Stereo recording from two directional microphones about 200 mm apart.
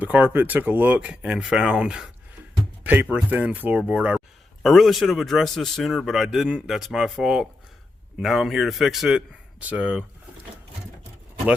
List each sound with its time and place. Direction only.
0.0 s speech: 10° right (ahead or behind)